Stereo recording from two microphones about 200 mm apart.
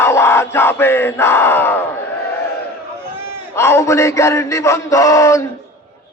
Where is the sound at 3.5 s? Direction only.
15° left (ahead or behind).